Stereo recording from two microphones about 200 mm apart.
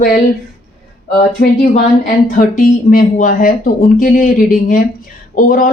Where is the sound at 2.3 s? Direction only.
45° left (ahead or behind).